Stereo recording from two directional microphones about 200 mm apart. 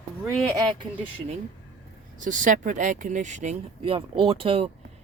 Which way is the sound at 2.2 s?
40° right (ahead or behind).